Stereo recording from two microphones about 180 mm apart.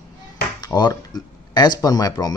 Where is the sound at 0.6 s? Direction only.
20° left (ahead or behind).